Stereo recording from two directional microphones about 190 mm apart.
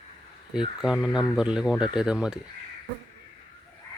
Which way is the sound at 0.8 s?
Centre (ahead or behind).